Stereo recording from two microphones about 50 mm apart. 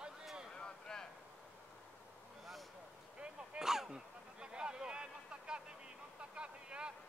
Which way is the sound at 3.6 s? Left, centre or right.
Centre.